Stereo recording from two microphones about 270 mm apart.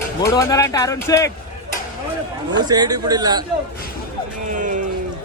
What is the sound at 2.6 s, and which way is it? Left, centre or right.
Speech, centre.